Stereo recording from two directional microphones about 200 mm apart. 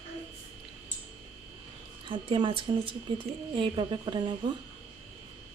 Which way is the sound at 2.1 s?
25° right (ahead or behind).